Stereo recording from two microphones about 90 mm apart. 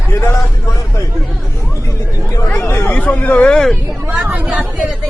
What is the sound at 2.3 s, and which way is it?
Chatter, 35° left (ahead or behind).